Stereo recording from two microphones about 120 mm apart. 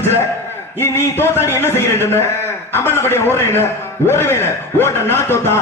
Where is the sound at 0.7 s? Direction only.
20° left (ahead or behind).